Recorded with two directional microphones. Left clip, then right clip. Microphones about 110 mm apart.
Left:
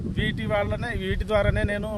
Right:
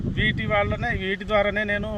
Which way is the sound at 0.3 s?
50° left (ahead or behind).